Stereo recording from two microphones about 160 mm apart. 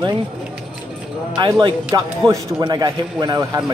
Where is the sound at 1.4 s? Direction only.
30° right (ahead or behind).